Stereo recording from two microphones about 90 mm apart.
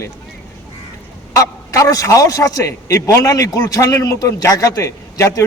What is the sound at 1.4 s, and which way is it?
Speech, 35° left (ahead or behind).